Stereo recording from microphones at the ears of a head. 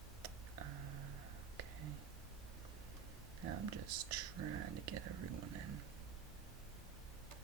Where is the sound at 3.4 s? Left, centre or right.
Right.